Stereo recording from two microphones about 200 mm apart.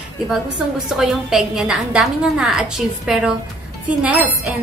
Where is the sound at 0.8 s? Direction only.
Centre (ahead or behind).